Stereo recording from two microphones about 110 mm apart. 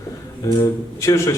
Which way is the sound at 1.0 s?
25° left (ahead or behind).